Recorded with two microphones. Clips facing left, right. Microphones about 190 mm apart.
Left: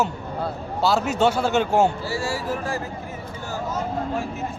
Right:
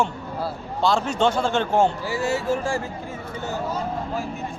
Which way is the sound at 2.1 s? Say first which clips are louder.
Right 3 dB; 20° right (ahead or behind).